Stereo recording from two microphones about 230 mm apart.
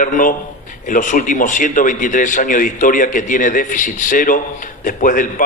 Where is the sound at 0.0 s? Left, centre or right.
Left.